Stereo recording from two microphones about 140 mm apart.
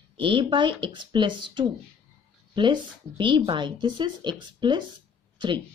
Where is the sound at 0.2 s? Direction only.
35° right (ahead or behind).